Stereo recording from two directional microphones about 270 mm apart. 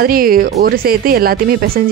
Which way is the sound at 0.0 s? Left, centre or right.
Right.